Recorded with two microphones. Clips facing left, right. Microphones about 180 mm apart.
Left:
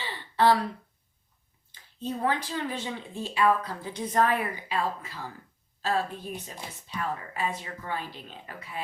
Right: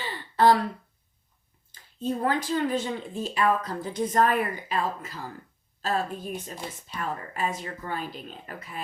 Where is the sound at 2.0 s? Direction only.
45° right (ahead or behind).